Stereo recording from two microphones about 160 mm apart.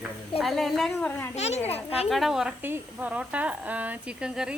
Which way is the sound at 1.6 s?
40° left (ahead or behind).